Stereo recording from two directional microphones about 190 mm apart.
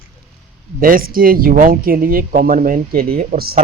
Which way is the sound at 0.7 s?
50° right (ahead or behind).